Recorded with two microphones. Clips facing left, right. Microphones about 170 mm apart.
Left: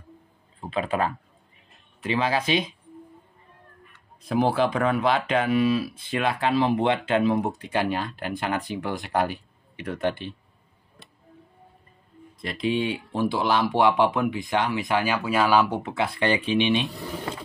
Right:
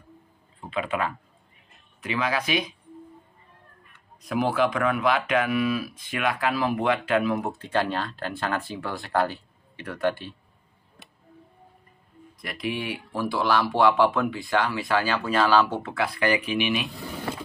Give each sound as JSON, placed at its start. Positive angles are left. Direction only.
{"t": 0.6, "sound": "speech", "side_deg": 35}
{"t": 4.2, "sound": "speech", "side_deg": 30}
{"t": 12.4, "sound": "speech", "side_deg": 25}